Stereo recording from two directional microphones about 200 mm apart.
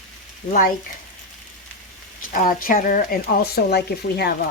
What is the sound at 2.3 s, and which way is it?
Speech, 45° left (ahead or behind).